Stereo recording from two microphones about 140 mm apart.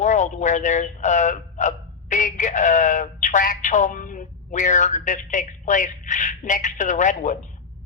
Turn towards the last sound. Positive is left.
turn(degrees=60)  # may be behind; listen again after turning